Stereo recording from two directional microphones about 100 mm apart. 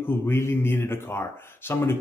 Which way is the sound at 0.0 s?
25° left (ahead or behind).